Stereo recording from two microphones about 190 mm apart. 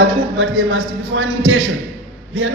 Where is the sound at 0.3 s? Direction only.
90° right.